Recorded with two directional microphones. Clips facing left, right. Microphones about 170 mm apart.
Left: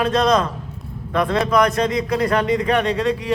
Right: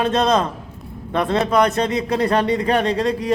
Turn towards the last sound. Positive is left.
turn(degrees=-35)  # may be behind; listen again after turning